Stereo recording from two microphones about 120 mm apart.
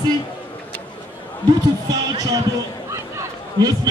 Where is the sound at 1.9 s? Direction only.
30° right (ahead or behind).